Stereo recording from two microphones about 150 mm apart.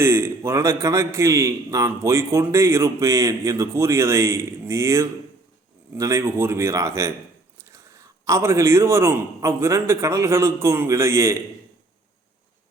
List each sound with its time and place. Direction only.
0.0 s a man's voice: 15° right (ahead or behind)